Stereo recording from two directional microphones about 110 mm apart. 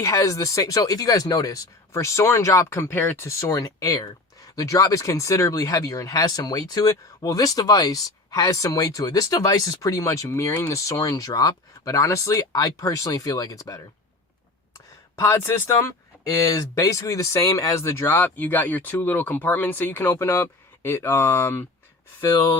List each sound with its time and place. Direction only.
0.0 s speech: 30° left (ahead or behind)
15.1 s speech: 25° left (ahead or behind)
22.3 s speech: 35° left (ahead or behind)